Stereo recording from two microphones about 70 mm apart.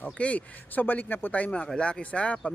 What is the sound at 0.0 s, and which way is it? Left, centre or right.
Speech, centre.